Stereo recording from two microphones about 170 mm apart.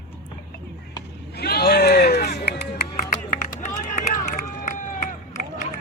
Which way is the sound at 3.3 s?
50° left (ahead or behind).